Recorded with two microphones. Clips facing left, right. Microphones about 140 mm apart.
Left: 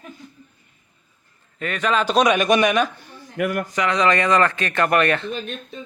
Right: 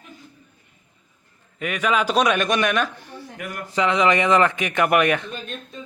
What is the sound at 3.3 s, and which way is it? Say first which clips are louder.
Speech: left 11 dB; 55° left (ahead or behind).